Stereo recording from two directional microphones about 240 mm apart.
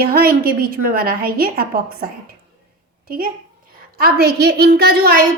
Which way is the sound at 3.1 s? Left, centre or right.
Right.